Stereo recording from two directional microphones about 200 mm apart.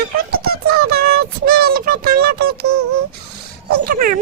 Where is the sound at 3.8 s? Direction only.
50° right (ahead or behind).